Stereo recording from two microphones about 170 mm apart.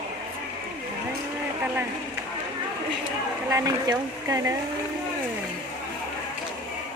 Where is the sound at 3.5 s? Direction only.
20° right (ahead or behind).